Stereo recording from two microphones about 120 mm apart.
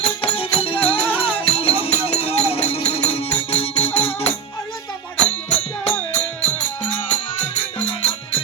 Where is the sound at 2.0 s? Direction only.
55° left (ahead or behind).